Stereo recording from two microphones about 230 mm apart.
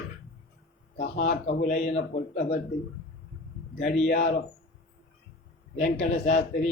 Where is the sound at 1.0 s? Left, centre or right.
Left.